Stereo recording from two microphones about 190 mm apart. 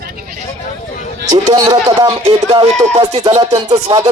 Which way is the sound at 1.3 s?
20° right (ahead or behind).